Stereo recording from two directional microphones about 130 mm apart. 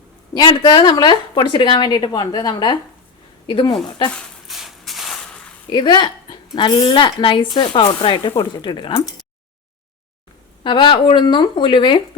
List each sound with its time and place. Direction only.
0.3 s a woman's voice: 30° left (ahead or behind)
4.1 s a sound: centre (ahead or behind)
5.7 s speech: 35° left (ahead or behind)
10.6 s speech: 40° left (ahead or behind)